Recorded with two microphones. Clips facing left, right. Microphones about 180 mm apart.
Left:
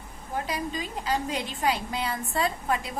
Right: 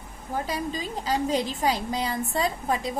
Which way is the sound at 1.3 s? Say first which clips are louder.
Right 3 dB; 40° right (ahead or behind).